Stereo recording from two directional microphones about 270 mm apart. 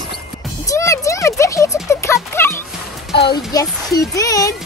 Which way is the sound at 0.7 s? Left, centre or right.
Centre.